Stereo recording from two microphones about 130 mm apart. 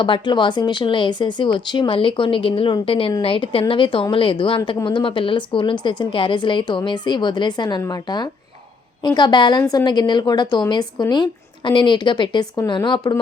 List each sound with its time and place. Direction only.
0.0 s a woman's voice: 35° left (ahead or behind)